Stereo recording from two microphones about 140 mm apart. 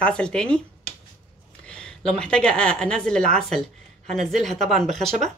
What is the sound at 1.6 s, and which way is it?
A woman's voice, 5° left (ahead or behind).